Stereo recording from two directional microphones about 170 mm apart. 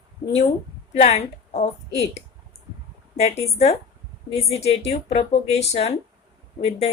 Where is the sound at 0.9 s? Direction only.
40° left (ahead or behind).